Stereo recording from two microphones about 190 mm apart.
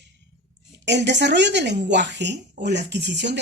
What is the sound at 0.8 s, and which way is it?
Speech, 65° right (ahead or behind).